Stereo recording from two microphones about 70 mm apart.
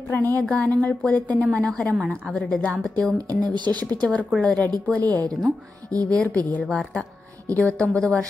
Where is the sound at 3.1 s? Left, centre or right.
Right.